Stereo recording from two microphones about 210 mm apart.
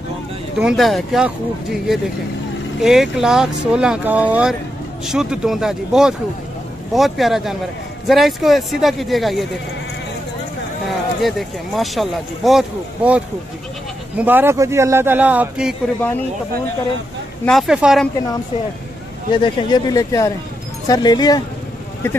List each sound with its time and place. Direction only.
0.6 s speech: centre (ahead or behind)
11.1 s a man's voice: centre (ahead or behind)
17.5 s speech: centre (ahead or behind)
19.3 s speech: 20° left (ahead or behind)